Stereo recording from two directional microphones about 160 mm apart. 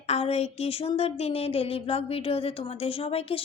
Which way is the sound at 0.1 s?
40° left (ahead or behind).